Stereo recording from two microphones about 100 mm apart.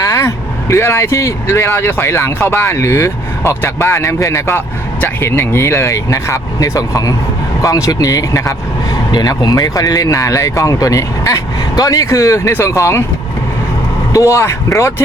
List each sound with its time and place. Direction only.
0.0 s speech: 30° left (ahead or behind)
14.1 s speech: 30° left (ahead or behind)